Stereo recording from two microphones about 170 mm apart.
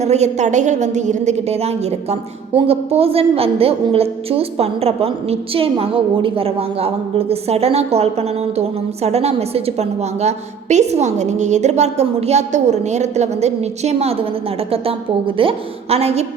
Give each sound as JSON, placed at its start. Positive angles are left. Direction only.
{"t": 0.0, "sound": "a woman's voice", "side_deg": -40}
{"t": 15.4, "sound": "a woman's voice", "side_deg": -35}